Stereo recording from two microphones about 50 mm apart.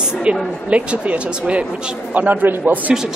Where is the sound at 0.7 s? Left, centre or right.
Right.